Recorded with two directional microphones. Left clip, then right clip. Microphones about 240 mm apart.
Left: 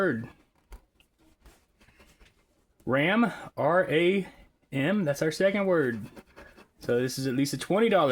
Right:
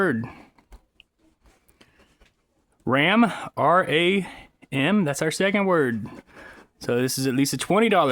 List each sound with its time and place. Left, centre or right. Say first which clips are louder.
0.0 s speech: right 4 dB; right
2.8 s speech: right 5 dB; right